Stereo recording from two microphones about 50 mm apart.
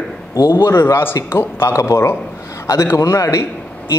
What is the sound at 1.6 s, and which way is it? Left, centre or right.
A man's voice, left.